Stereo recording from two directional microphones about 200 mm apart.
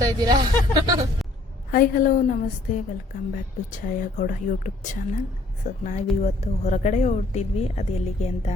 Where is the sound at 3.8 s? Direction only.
40° left (ahead or behind).